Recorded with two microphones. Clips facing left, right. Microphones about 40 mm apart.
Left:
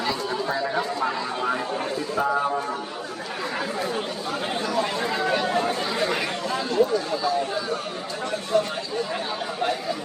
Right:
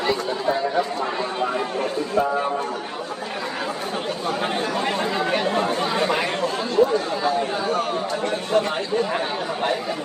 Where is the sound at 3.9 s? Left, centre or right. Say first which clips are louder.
Right 3 dB; right.